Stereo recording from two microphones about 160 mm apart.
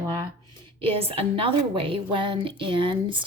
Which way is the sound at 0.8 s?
35° right (ahead or behind).